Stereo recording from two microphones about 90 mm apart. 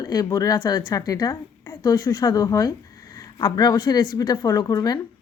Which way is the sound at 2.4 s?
40° left (ahead or behind).